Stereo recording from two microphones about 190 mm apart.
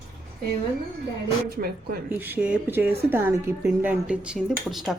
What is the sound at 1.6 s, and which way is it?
Speech, 50° right (ahead or behind).